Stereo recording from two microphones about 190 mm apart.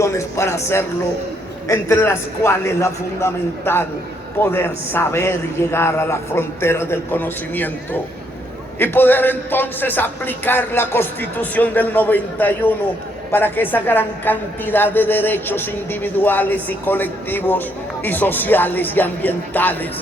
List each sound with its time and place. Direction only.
0.0 s a woman's voice: 15° left (ahead or behind)
8.8 s a woman's voice: 10° left (ahead or behind)